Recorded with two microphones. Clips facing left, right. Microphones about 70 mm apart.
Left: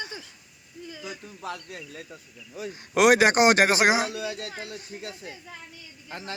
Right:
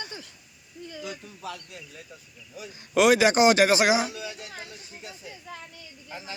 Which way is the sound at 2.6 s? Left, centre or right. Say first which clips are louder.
Even; left.